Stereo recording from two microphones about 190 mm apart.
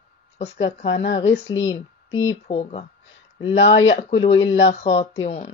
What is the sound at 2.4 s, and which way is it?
Speech, 30° left (ahead or behind).